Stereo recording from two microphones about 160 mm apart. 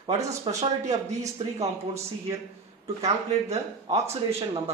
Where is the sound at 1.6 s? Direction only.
15° right (ahead or behind).